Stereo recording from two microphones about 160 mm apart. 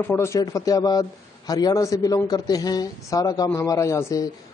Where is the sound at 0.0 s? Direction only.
15° left (ahead or behind).